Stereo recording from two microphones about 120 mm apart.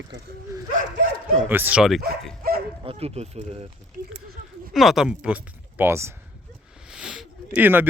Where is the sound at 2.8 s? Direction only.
55° right (ahead or behind).